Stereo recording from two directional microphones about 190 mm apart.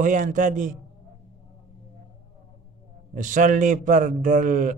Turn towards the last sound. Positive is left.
turn(degrees=-40)  # may be behind; listen again after turning